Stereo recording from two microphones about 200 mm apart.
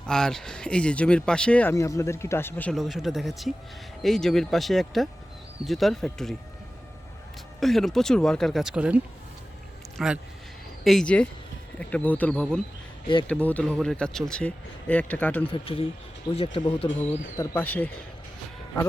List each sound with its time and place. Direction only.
0.0 s speech: 5° left (ahead or behind)
7.6 s speech: centre (ahead or behind)
10.0 s speech: centre (ahead or behind)
15.5 s speech: 25° left (ahead or behind)
17.3 s speech: 10° left (ahead or behind)